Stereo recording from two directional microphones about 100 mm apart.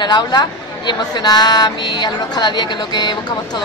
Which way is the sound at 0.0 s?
45° left (ahead or behind).